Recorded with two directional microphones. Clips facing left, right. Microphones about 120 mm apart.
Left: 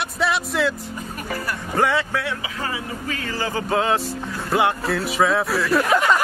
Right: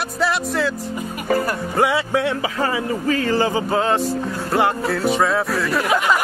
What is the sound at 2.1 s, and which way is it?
Speech, 25° right (ahead or behind).